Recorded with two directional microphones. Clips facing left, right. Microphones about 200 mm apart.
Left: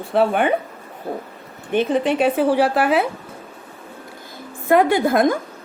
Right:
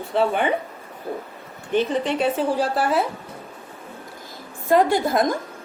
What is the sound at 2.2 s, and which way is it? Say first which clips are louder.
Speech: left 6 dB; 65° left (ahead or behind).